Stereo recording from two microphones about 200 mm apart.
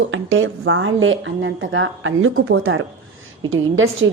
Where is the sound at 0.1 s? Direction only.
75° right (ahead or behind).